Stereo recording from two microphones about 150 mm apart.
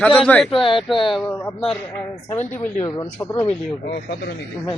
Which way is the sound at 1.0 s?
5° left (ahead or behind).